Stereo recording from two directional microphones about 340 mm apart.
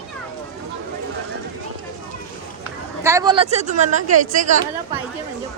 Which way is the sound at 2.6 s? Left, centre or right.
Centre.